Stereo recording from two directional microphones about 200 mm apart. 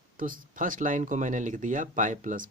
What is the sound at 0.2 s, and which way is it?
Speech, 45° right (ahead or behind).